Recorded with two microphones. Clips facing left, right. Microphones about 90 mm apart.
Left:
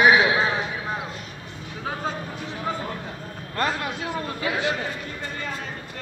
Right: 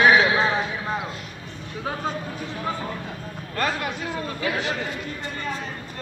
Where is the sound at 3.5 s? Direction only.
25° left (ahead or behind).